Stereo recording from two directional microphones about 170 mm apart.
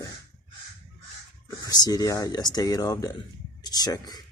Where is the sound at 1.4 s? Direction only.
20° left (ahead or behind).